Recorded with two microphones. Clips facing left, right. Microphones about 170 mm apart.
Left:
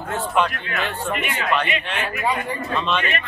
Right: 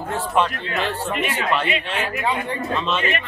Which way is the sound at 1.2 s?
30° right (ahead or behind).